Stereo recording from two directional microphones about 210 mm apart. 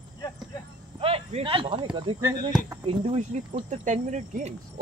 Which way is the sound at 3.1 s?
30° right (ahead or behind).